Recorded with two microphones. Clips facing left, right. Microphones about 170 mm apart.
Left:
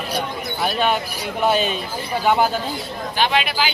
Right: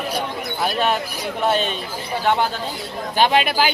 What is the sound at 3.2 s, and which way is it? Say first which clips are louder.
Speech: right 3 dB; 45° right (ahead or behind).